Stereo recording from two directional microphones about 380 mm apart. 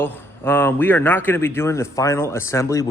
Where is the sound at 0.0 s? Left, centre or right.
Centre.